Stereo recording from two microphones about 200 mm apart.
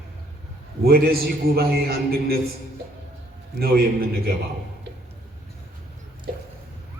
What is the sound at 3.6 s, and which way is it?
Speech, 50° right (ahead or behind).